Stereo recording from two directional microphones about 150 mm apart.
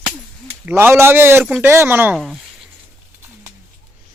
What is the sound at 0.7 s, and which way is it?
Speech, 15° right (ahead or behind).